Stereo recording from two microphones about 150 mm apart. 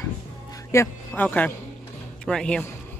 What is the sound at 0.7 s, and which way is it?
Speech, 20° left (ahead or behind).